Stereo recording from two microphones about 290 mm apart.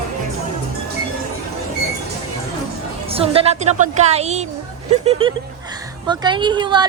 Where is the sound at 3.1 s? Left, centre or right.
Centre.